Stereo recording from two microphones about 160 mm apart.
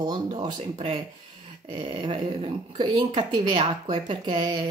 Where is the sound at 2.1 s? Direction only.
40° right (ahead or behind).